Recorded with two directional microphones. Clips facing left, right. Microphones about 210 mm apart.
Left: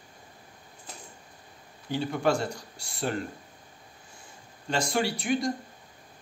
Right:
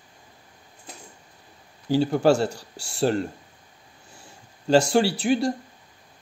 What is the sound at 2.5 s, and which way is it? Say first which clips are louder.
Speech: right 1 dB; 75° right (ahead or behind).